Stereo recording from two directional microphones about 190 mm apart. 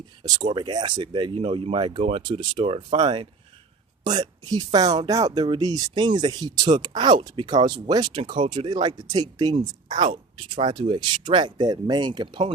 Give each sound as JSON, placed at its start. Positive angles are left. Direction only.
{"t": 0.2, "sound": "speech", "side_deg": -25}